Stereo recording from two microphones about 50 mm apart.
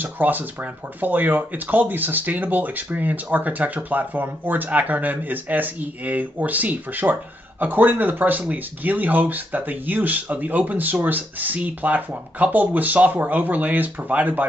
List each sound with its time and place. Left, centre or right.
0.0 s speech: right